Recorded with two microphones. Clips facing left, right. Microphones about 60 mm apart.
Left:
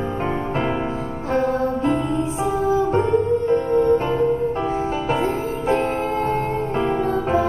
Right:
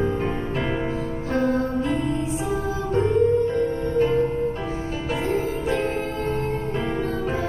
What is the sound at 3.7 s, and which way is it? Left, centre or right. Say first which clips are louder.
Music: left 5 dB; left.